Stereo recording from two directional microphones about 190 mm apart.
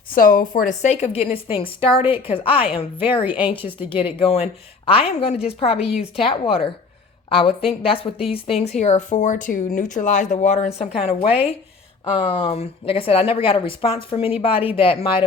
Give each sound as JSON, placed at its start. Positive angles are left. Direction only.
{"t": 0.1, "sound": "speech", "side_deg": 50}